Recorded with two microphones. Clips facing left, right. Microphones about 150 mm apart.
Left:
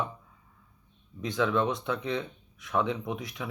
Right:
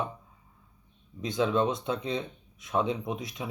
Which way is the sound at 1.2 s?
20° right (ahead or behind).